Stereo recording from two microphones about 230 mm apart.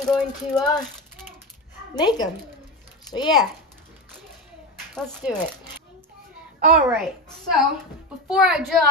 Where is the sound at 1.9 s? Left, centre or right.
Centre.